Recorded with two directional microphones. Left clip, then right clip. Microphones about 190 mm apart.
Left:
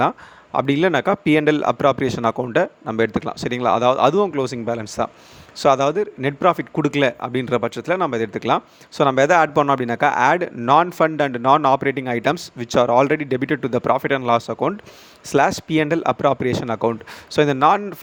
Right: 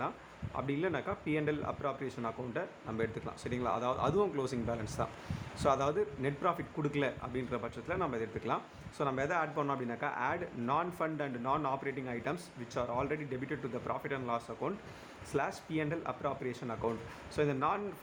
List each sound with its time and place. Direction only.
0.5 s a man's voice: 60° left (ahead or behind)